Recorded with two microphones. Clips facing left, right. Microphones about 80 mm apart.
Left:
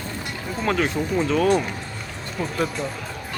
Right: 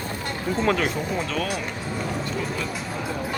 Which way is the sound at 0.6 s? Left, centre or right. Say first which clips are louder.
Even; centre.